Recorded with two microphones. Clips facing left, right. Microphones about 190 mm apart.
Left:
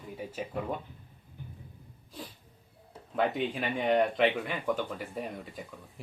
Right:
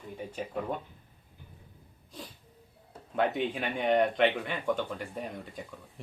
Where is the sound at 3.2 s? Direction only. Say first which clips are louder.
Even; centre (ahead or behind).